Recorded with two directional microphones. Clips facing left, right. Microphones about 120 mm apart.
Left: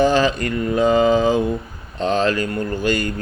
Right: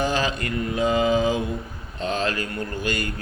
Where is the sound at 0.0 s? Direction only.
40° left (ahead or behind).